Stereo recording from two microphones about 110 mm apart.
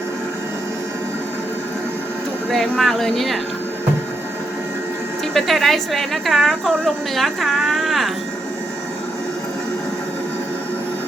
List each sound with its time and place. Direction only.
2.5 s a woman's voice: centre (ahead or behind)
5.3 s a woman's voice: centre (ahead or behind)